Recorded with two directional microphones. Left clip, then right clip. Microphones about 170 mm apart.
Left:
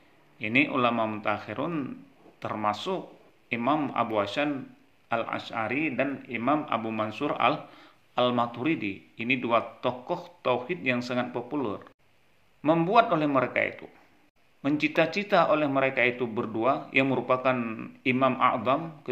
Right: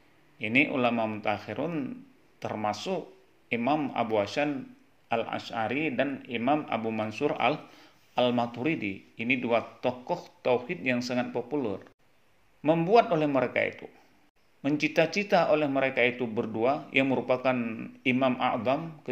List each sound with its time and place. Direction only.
0.4 s a man's voice: 30° right (ahead or behind)
5.6 s a man's voice: 35° right (ahead or behind)